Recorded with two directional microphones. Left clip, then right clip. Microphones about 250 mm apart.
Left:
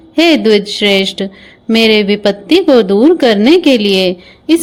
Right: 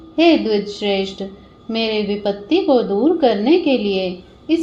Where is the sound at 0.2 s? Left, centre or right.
Left.